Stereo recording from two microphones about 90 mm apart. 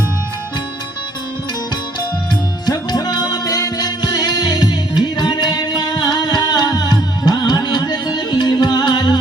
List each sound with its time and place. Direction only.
2.6 s music: 45° left (ahead or behind)